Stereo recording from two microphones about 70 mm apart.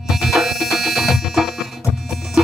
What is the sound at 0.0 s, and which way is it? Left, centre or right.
Music, centre.